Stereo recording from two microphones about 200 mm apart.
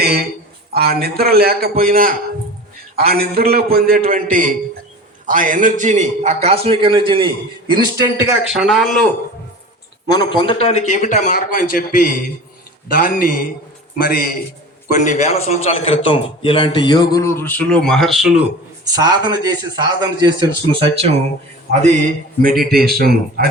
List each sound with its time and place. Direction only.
0.0 s a man's voice: 50° right (ahead or behind); by 7.3 s 25° right (ahead or behind)
7.7 s a man's voice: 15° right (ahead or behind)
8.4 s speech: centre (ahead or behind)
10.1 s a man's voice: 20° left (ahead or behind); by 18.4 s centre (ahead or behind)
18.9 s a man's voice: 20° right (ahead or behind)
22.4 s speech: 45° right (ahead or behind)